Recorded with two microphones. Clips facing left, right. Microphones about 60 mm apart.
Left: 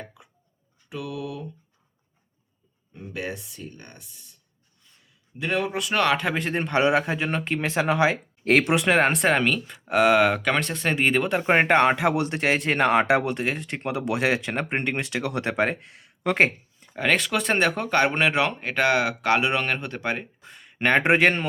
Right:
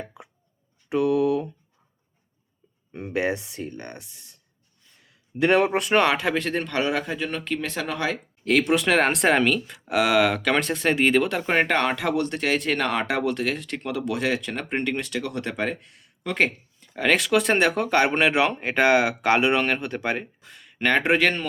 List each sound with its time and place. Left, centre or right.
0.9 s speech: right
2.9 s speech: right
5.4 s speech: right
5.9 s speech: centre
6.3 s a man's voice: centre
11.4 s a man's voice: left
12.1 s a man's voice: centre; by 16.5 s left
16.9 s speech: centre
19.5 s speech: centre
20.4 s a sound: centre
20.7 s speech: centre